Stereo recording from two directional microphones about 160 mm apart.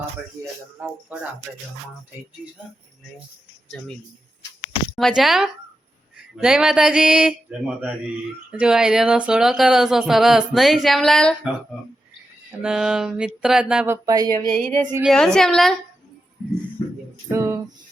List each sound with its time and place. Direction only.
1.1 s music: 5° right (ahead or behind)
4.9 s speech: centre (ahead or behind)
12.6 s speech: 5° right (ahead or behind); by 14.5 s 25° right (ahead or behind)
14.5 s speech: 5° left (ahead or behind)
16.8 s music: 15° left (ahead or behind)
17.2 s music: 15° right (ahead or behind)